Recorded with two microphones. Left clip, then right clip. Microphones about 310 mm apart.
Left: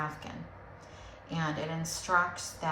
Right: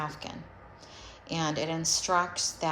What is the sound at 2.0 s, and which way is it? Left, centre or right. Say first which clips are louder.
Speech: left 2 dB; centre.